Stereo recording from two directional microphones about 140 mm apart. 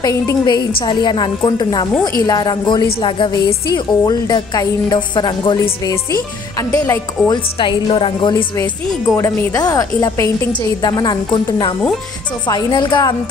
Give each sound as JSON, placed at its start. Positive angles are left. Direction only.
{"t": 0.0, "sound": "speech", "side_deg": 25}
{"t": 7.2, "sound": "speech", "side_deg": 35}
{"t": 8.5, "sound": "speech", "side_deg": 25}